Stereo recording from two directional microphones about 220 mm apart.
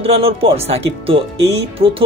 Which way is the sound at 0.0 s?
25° right (ahead or behind).